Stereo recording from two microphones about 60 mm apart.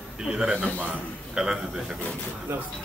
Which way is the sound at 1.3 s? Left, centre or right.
Centre.